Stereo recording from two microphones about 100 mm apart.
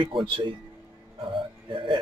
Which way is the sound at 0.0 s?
55° right (ahead or behind).